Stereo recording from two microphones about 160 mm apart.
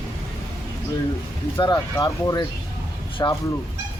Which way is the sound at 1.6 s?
25° left (ahead or behind).